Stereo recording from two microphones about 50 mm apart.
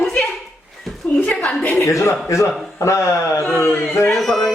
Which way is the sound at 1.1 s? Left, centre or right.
Left.